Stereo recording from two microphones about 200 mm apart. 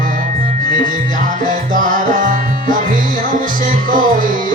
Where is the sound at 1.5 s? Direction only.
40° right (ahead or behind).